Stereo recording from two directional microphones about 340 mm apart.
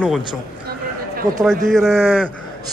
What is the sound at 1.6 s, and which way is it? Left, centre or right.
Speech, centre.